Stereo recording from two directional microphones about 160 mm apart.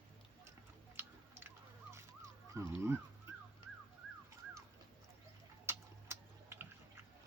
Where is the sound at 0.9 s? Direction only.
15° right (ahead or behind).